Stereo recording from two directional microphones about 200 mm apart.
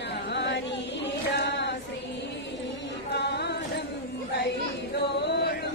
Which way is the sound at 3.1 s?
55° left (ahead or behind).